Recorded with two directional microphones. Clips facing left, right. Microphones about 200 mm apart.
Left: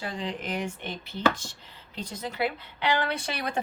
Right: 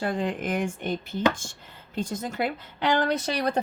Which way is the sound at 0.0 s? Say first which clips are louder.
Right 6 dB; 50° right (ahead or behind).